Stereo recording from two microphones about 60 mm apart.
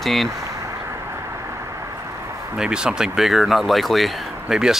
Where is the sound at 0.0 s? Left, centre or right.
Centre.